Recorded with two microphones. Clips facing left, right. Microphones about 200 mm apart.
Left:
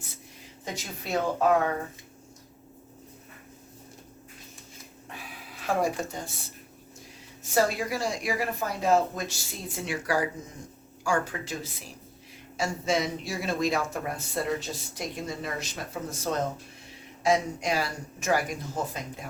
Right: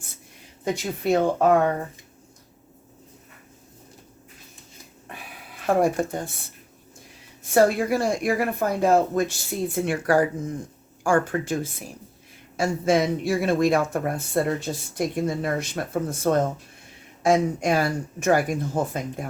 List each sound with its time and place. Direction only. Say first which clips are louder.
0.6 s speech: right 12 dB; 60° right (ahead or behind)
5.6 s speech: right 7 dB; 55° right (ahead or behind)
7.5 s speech: right 7 dB; 60° right (ahead or behind)